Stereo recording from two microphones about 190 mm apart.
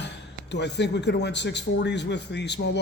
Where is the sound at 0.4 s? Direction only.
65° left (ahead or behind).